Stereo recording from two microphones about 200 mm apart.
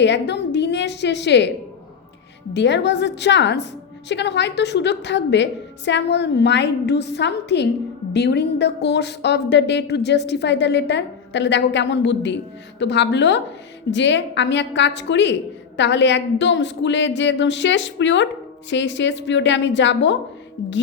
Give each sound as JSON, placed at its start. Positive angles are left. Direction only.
{"t": 0.0, "sound": "a woman's voice", "side_deg": 60}
{"t": 2.5, "sound": "speech", "side_deg": 60}